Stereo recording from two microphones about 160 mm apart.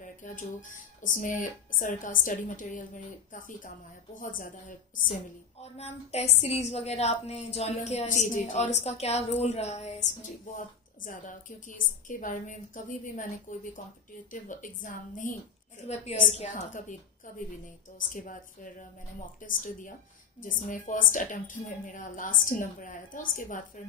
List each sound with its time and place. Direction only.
0.0 s speech: 55° left (ahead or behind)
5.6 s a woman's voice: 40° left (ahead or behind)
16.3 s speech: 50° left (ahead or behind)